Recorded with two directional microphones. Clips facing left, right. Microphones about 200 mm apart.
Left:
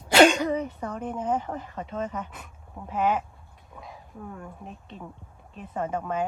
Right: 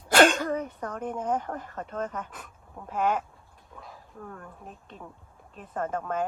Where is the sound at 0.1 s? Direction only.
5° left (ahead or behind).